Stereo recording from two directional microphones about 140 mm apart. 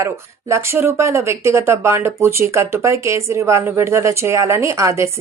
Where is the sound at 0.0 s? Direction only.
20° right (ahead or behind).